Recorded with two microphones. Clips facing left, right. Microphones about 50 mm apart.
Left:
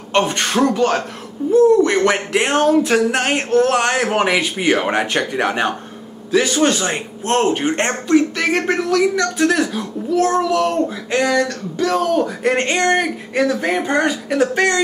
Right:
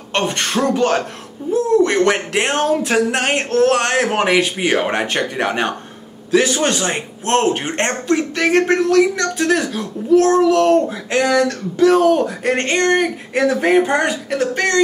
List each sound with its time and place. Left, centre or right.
0.1 s speech: centre
10.9 s speech: centre
12.3 s speech: centre
13.6 s speech: centre
13.8 s speech: centre